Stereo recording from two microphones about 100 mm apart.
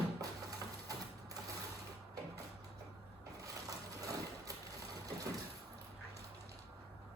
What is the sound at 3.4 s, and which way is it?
Vehicle, 35° right (ahead or behind).